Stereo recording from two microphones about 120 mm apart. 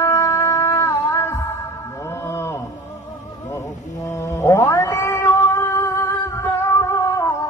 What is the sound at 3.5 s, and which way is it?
Cat, 25° left (ahead or behind).